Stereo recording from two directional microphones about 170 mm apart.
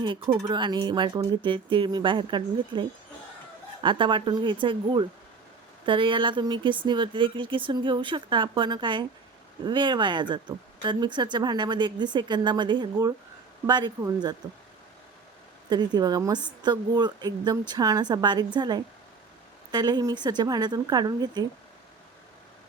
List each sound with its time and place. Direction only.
0.0 s speech: 30° right (ahead or behind)
15.7 s speech: 25° right (ahead or behind)